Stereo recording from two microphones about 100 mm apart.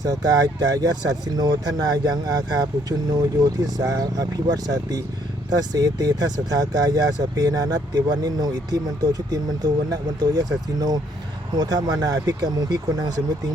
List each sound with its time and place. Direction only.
0.0 s speech: 40° right (ahead or behind)